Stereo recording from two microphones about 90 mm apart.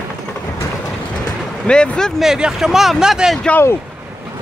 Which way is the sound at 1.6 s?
10° left (ahead or behind).